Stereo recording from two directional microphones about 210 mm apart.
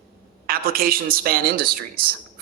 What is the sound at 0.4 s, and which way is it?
Speech, 45° right (ahead or behind).